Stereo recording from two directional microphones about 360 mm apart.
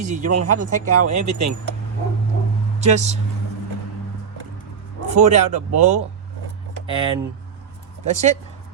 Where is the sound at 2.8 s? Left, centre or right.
Centre.